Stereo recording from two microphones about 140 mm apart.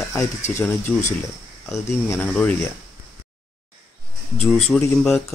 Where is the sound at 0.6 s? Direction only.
15° left (ahead or behind).